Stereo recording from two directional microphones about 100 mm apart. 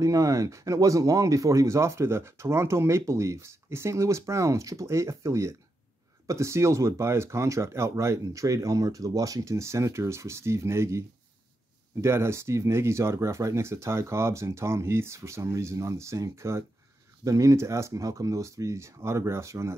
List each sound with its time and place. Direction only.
0.0 s speech: 35° right (ahead or behind)